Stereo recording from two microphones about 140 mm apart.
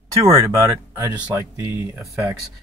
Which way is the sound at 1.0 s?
15° right (ahead or behind).